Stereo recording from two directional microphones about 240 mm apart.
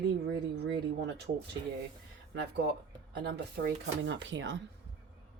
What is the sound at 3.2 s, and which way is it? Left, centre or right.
Speech, right.